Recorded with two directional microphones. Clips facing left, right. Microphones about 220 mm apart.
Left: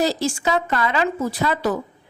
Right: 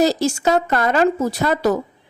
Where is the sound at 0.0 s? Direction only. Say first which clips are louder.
Right 4 dB; 45° right (ahead or behind).